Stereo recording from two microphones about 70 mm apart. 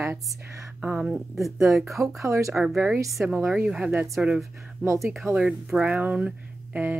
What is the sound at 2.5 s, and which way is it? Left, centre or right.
Speech, centre.